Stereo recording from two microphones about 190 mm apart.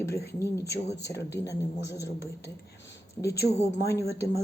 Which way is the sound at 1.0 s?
15° left (ahead or behind).